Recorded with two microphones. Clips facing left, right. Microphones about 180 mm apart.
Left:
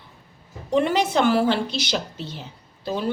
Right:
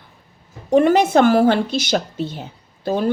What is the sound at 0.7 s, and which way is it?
A woman's voice, 45° right (ahead or behind).